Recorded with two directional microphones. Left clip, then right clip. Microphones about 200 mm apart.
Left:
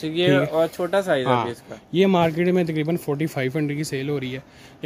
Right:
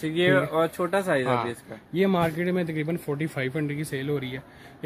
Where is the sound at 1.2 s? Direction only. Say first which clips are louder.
Left 4 dB; 55° left (ahead or behind).